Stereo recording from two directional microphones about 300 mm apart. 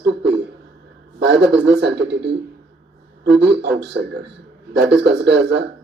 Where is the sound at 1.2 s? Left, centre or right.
Right.